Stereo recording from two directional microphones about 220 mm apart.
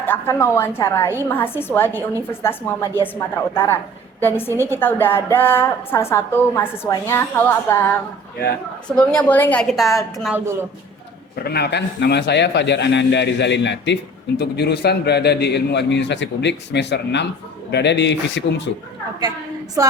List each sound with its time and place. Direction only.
0.0 s a woman's voice: 10° left (ahead or behind)
11.4 s a man's voice: 45° left (ahead or behind)